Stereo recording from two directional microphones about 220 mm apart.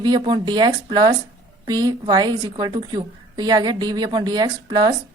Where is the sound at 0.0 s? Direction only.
20° right (ahead or behind).